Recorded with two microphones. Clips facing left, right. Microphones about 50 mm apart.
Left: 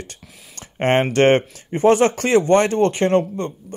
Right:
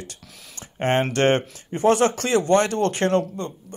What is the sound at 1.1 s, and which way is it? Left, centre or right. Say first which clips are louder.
A man's voice: left 5 dB; left.